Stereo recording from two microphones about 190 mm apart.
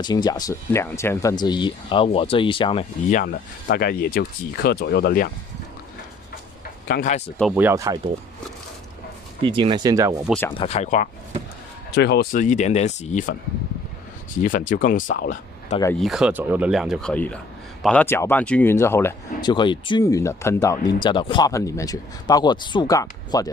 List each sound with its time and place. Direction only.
0.0 s speech: 20° left (ahead or behind); by 5.3 s 55° left (ahead or behind)
6.9 s speech: 40° left (ahead or behind)
7.5 s speech: 15° right (ahead or behind)
9.4 s speech: 25° right (ahead or behind)
10.6 s speech: 35° left (ahead or behind)
11.9 s speech: 60° left (ahead or behind); by 13.4 s 45° left (ahead or behind)
14.4 s speech: 45° left (ahead or behind)
16.0 s speech: centre (ahead or behind)
19.5 s speech: 25° left (ahead or behind)